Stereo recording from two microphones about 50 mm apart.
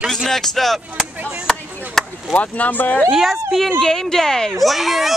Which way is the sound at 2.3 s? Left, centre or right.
Left.